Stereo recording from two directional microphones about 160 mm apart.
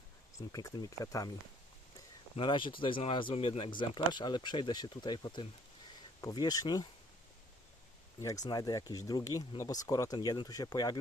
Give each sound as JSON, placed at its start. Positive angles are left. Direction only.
{"t": 0.3, "sound": "speech", "side_deg": 20}
{"t": 2.3, "sound": "speech", "side_deg": 30}
{"t": 8.2, "sound": "speech", "side_deg": 20}